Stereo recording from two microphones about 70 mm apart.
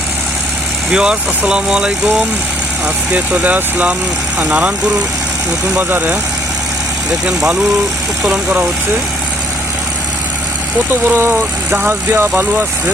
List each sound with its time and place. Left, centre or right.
0.9 s speech: centre
3.4 s speech: right
5.7 s speech: right
11.0 s speech: right